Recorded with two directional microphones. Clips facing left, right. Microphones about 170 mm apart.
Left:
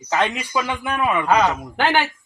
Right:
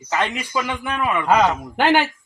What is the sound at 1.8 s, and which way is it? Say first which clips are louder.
Speech: right 3 dB; 15° right (ahead or behind).